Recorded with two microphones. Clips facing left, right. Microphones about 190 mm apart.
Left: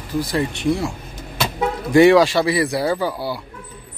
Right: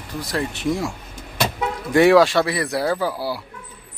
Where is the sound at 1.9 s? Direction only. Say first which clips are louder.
Left 2 dB; centre (ahead or behind).